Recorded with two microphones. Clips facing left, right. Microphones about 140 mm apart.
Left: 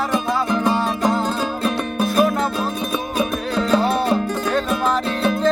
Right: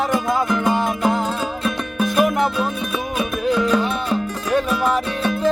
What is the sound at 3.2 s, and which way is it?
Music, 35° left (ahead or behind).